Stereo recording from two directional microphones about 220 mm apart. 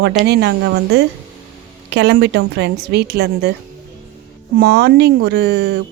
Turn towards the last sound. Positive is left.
turn(degrees=-45)  # may be behind; listen again after turning